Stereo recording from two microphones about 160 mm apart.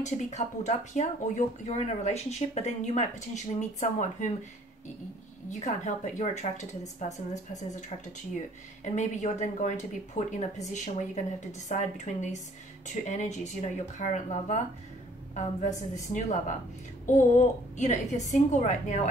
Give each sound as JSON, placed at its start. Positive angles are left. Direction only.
{"t": 0.0, "sound": "speech", "side_deg": 45}
{"t": 5.5, "sound": "speech", "side_deg": 50}